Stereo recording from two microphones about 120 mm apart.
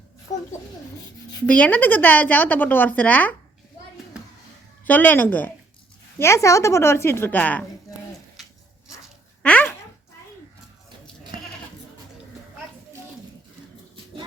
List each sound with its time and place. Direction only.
1.5 s a woman's voice: 10° left (ahead or behind)
4.9 s a woman's voice: 15° left (ahead or behind)
8.4 s zipper: centre (ahead or behind)
9.4 s a sound: 10° left (ahead or behind)